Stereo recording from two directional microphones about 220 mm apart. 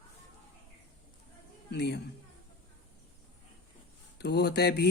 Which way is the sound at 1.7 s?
50° left (ahead or behind).